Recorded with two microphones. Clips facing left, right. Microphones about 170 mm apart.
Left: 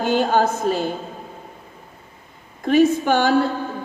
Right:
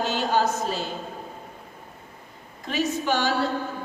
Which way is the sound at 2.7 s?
55° left (ahead or behind).